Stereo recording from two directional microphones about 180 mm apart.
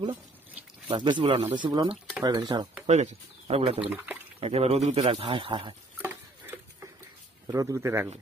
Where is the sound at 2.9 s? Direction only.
40° right (ahead or behind).